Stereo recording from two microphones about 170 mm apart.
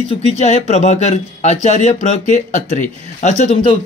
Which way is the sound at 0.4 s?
40° left (ahead or behind).